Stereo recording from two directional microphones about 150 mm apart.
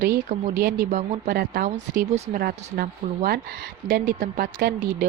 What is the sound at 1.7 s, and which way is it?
Speech, 55° right (ahead or behind).